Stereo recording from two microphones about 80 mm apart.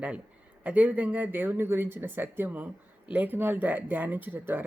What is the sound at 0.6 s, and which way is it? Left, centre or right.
Speech, centre.